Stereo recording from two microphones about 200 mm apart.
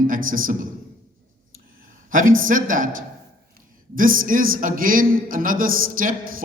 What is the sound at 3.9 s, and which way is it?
A man's voice, 45° right (ahead or behind).